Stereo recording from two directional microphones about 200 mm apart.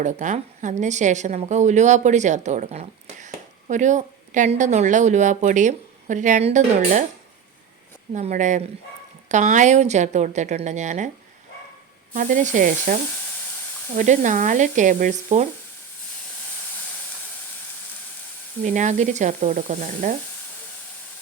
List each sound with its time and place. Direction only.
0.0 s a woman's voice: 35° right (ahead or behind)
8.1 s a woman's voice: 35° right (ahead or behind)
12.1 s a woman's voice: 40° right (ahead or behind)
18.6 s a woman's voice: 40° right (ahead or behind)